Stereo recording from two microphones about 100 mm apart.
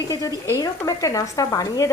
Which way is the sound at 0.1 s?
35° left (ahead or behind).